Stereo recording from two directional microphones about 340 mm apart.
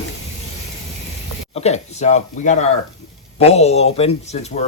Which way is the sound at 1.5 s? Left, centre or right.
Centre.